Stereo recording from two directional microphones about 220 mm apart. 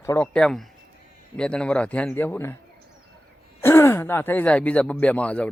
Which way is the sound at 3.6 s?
10° left (ahead or behind).